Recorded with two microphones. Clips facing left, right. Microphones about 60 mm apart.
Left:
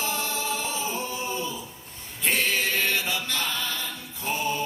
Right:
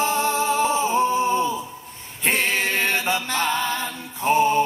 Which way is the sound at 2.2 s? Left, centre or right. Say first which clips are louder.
Right 3 dB; right.